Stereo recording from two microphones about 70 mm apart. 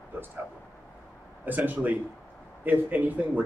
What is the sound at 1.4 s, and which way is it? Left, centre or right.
Speech, right.